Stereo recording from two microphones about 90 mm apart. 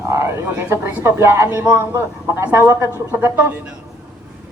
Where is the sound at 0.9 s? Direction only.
30° right (ahead or behind).